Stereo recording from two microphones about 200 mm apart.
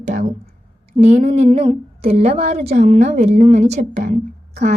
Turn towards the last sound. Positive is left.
turn(degrees=-35)  # may be behind; listen again after turning